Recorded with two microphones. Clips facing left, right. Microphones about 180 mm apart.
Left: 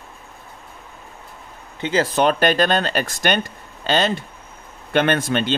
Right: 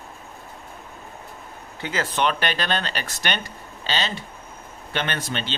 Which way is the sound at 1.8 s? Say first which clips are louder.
Left 6 dB; 30° left (ahead or behind).